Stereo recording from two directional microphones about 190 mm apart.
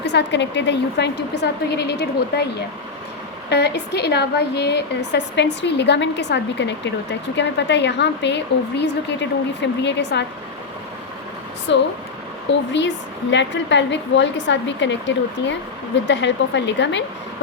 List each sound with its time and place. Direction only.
0.0 s a woman's voice: 65° left (ahead or behind)
3.5 s a woman's voice: 60° left (ahead or behind)
11.7 s a woman's voice: 70° left (ahead or behind)